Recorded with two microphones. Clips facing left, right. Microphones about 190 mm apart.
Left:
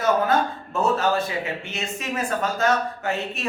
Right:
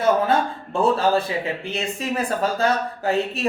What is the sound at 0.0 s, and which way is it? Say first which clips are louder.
A man's voice: right 2 dB; 30° right (ahead or behind).